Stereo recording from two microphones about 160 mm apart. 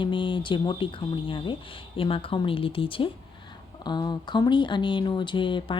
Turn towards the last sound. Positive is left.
turn(degrees=30)  # may be behind; listen again after turning